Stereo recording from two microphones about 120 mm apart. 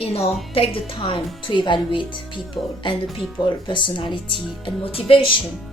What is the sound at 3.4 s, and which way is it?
Speech, 40° left (ahead or behind).